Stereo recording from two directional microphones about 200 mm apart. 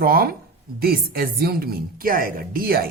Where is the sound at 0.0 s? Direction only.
50° right (ahead or behind).